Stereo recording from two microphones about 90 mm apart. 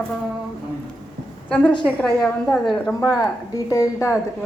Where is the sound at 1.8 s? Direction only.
5° left (ahead or behind).